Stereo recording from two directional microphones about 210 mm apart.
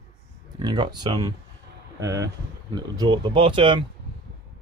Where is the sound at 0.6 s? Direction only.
20° right (ahead or behind).